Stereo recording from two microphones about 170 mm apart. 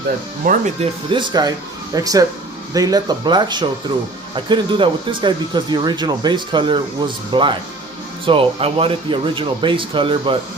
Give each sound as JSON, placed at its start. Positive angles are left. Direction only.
{"t": 0.4, "sound": "speech", "side_deg": -45}
{"t": 1.1, "sound": "speech", "side_deg": -25}